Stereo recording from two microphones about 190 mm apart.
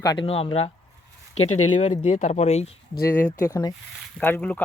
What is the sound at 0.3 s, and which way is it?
Speech, 30° left (ahead or behind).